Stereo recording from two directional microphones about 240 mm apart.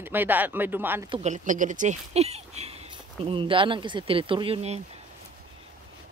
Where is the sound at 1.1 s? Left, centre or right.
Right.